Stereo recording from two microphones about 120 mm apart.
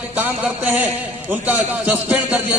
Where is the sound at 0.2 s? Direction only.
15° right (ahead or behind).